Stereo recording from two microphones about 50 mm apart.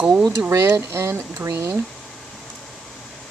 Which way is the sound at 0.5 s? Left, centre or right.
Right.